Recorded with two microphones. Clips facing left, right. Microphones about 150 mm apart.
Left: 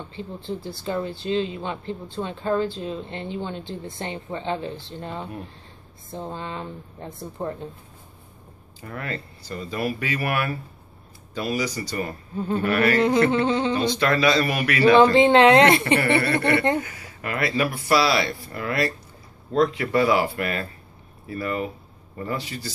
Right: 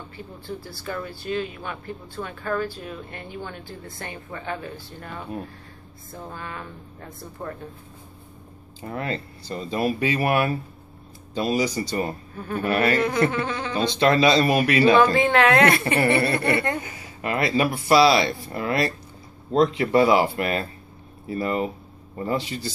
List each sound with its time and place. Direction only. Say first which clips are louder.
0.1 s speech: left 4 dB; 25° left (ahead or behind)
8.8 s speech: right 3 dB; 25° right (ahead or behind)
12.4 s speech: left 5 dB; 20° left (ahead or behind)
12.6 s speech: even; 25° right (ahead or behind)
13.3 s speech: left 6 dB; 25° left (ahead or behind)
13.7 s speech: right 2 dB; 25° right (ahead or behind)
15.0 s speech: left 3 dB; 20° left (ahead or behind)
16.8 s speech: right 3 dB; 25° right (ahead or behind)